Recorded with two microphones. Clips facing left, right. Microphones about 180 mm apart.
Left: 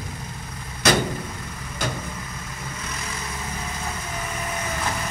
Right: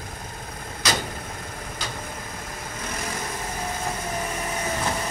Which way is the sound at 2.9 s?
50° right (ahead or behind).